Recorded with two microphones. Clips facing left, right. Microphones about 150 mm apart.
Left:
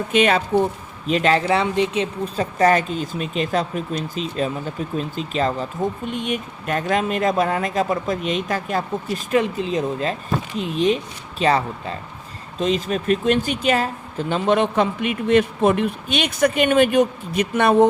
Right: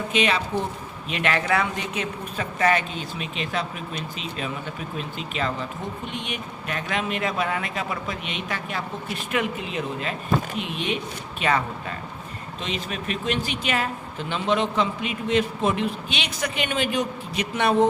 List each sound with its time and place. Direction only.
0.1 s speech: 50° left (ahead or behind)
1.1 s speech: 30° left (ahead or behind); by 17.8 s 50° left (ahead or behind)